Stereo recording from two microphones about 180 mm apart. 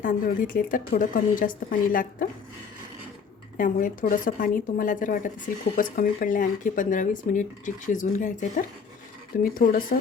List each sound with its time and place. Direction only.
0.0 s speech: 50° left (ahead or behind)
3.6 s speech: 50° left (ahead or behind)